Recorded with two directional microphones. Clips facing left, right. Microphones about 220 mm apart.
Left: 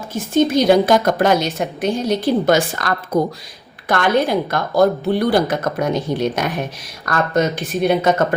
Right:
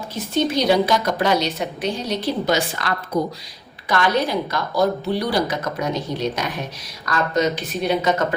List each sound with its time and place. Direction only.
0.1 s a woman's voice: 50° left (ahead or behind)